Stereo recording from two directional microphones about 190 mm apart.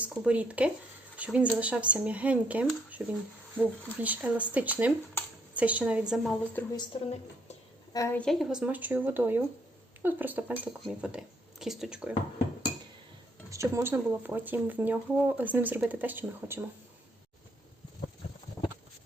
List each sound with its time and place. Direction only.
0.0 s speech: 5° right (ahead or behind)
6.4 s a woman's voice: 10° left (ahead or behind)
6.7 s a woman's voice: 30° left (ahead or behind)
7.9 s a woman's voice: 15° left (ahead or behind)
8.2 s speech: centre (ahead or behind)
13.5 s speech: 15° right (ahead or behind)